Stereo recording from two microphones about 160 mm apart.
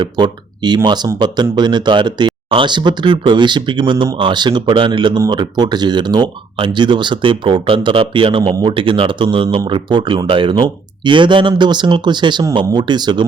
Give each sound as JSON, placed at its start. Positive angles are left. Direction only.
{"t": 0.0, "sound": "speech", "side_deg": -30}